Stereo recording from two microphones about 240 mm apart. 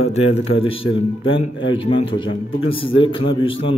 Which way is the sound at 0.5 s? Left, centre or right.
Left.